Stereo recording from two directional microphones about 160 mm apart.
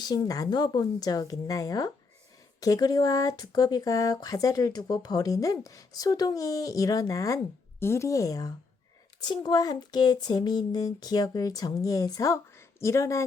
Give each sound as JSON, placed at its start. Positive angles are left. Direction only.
{"t": 0.0, "sound": "speech", "side_deg": 25}